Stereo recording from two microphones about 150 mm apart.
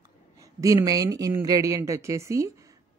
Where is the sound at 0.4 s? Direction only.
20° right (ahead or behind).